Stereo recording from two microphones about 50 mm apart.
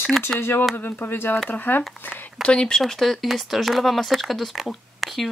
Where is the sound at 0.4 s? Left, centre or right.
Left.